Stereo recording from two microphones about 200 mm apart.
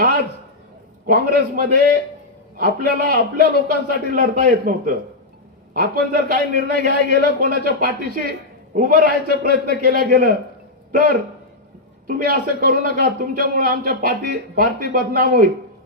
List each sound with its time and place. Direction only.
1.0 s a man's voice: 45° right (ahead or behind)